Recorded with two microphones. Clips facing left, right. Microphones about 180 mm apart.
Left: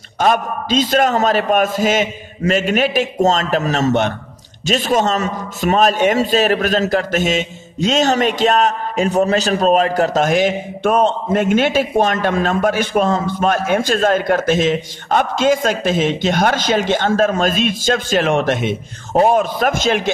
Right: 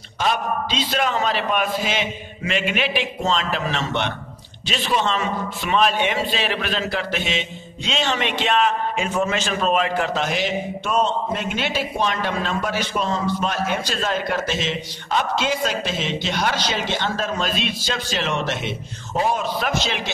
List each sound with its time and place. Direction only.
0.2 s a man's voice: 50° left (ahead or behind)